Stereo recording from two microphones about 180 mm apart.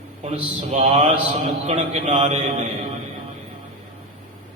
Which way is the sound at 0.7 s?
35° right (ahead or behind).